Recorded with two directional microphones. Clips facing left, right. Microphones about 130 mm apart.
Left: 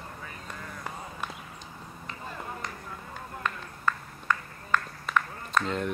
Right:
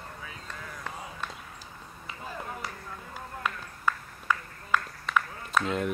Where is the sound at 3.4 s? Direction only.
10° right (ahead or behind).